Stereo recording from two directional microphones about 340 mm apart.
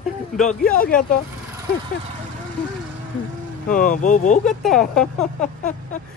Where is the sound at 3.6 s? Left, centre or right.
Left.